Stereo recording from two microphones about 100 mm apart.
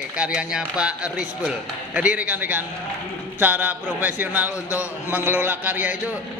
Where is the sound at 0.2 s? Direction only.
10° right (ahead or behind).